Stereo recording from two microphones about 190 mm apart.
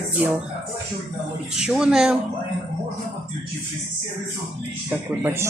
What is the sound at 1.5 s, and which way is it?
Speech, 5° right (ahead or behind).